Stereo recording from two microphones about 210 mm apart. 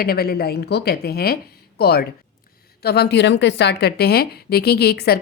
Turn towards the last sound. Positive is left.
turn(degrees=50)  # may be behind; listen again after turning